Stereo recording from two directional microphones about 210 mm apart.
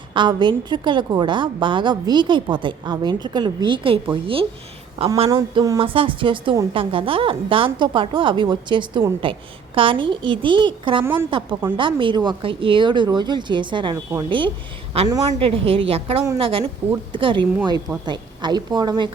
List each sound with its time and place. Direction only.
0.1 s a woman's voice: 20° right (ahead or behind)